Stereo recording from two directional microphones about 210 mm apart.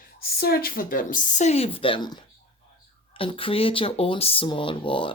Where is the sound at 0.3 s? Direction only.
45° left (ahead or behind).